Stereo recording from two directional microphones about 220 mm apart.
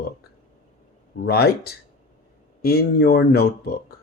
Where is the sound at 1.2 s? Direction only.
45° left (ahead or behind).